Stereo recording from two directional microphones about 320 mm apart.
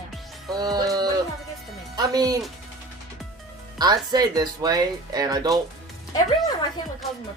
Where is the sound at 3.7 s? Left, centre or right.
Centre.